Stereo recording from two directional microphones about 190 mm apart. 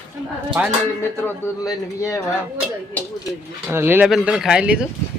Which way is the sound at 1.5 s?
15° left (ahead or behind).